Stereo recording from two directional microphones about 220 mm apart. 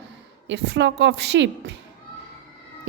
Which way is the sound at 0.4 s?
55° right (ahead or behind).